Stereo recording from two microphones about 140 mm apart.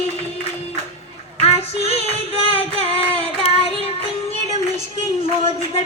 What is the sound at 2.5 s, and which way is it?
Music, 45° left (ahead or behind).